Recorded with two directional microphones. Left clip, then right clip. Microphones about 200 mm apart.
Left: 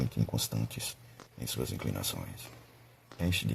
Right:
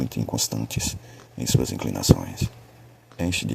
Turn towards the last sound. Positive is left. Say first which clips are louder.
# right 7 dB
turn(degrees=-25)  # may be behind; listen again after turning